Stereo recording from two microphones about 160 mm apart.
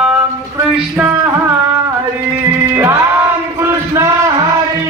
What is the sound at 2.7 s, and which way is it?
Music, 15° right (ahead or behind).